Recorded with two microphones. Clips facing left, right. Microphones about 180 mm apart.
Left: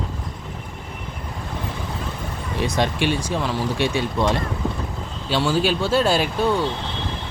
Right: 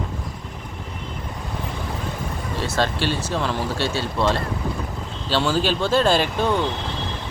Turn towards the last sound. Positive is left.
turn(degrees=10)  # may be behind; listen again after turning